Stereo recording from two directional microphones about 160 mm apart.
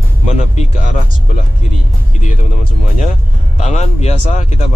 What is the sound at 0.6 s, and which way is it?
Speech, 55° left (ahead or behind).